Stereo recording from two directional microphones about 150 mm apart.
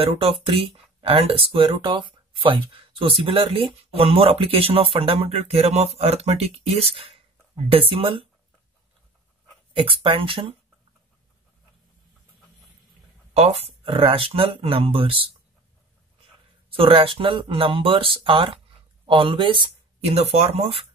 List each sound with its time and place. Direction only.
0.0 s speech: 40° right (ahead or behind)
9.8 s speech: 35° right (ahead or behind)
13.6 s speech: 35° right (ahead or behind)
16.7 s speech: 35° right (ahead or behind)